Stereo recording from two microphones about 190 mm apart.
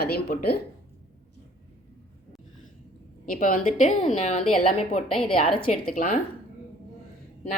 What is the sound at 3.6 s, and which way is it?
A woman's voice, 35° left (ahead or behind).